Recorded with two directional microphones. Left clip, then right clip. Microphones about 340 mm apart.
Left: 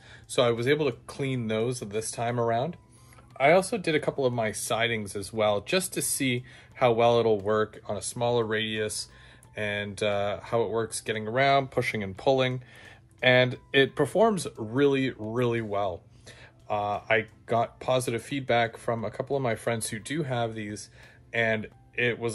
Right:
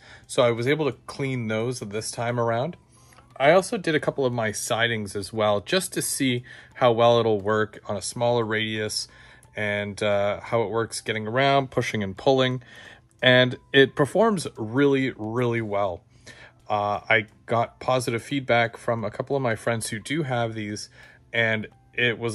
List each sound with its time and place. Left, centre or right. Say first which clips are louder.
0.3 s speech: right 3 dB; right